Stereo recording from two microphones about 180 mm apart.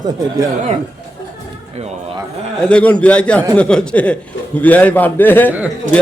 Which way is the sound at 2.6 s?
5° left (ahead or behind).